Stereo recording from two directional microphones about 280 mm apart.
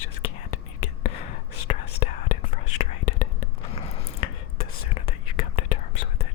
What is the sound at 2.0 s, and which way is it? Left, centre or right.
Whispering, left.